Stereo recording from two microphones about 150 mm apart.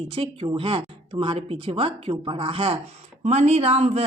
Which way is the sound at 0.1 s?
40° right (ahead or behind).